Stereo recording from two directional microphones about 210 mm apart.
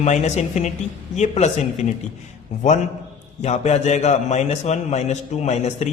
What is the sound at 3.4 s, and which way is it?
A man's voice, 35° left (ahead or behind).